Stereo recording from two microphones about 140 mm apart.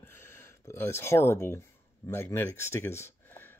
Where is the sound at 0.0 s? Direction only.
15° left (ahead or behind).